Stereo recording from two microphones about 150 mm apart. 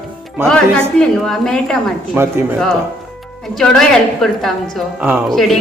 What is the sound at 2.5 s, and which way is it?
A woman's voice, 5° left (ahead or behind).